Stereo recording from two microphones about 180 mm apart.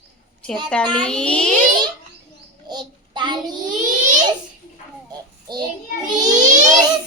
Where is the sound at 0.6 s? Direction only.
5° left (ahead or behind).